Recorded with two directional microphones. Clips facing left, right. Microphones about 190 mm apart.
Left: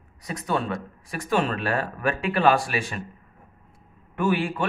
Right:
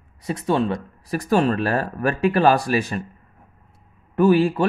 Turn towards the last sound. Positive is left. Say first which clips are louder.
# right 8 dB
turn(degrees=-35)  # may be behind; listen again after turning